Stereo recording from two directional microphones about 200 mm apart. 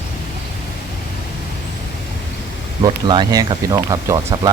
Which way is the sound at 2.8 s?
20° right (ahead or behind).